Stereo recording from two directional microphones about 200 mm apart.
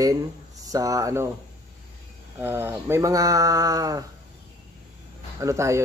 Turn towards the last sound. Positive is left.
turn(degrees=-15)  # may be behind; listen again after turning